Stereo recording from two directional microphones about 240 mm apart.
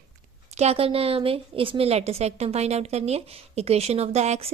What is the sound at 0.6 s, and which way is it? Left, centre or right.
A woman's voice, right.